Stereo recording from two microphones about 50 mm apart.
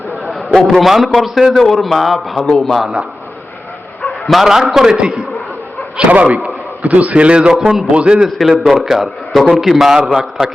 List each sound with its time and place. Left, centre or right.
0.3 s a sound: centre
0.8 s a man's voice: centre
2.5 s a man's voice: centre
4.3 s a man's voice: centre
6.1 s a man's voice: right
7.6 s a man's voice: centre
7.9 s a man's voice: right
8.4 s a man's voice: centre